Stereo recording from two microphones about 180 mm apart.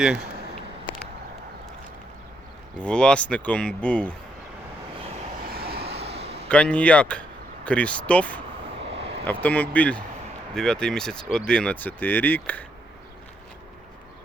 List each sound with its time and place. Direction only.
2.7 s speech: 5° left (ahead or behind)
5.6 s vehicle: 30° right (ahead or behind)
6.0 s a sound: 35° right (ahead or behind)
6.5 s speech: 5° left (ahead or behind)
8.8 s vehicle: 75° right (ahead or behind)
9.2 s speech: 10° left (ahead or behind)